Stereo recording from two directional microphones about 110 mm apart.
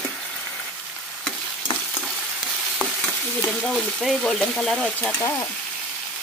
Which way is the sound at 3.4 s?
5° left (ahead or behind).